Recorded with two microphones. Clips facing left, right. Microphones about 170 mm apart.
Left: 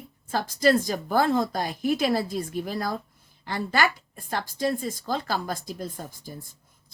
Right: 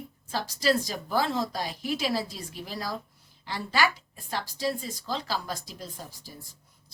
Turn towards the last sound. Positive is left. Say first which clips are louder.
# left 5 dB
turn(degrees=50)  # may be behind; listen again after turning